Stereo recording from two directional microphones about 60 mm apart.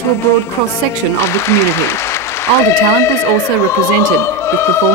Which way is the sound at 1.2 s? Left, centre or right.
Left.